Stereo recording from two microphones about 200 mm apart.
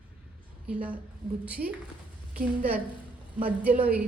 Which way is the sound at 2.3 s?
5° right (ahead or behind).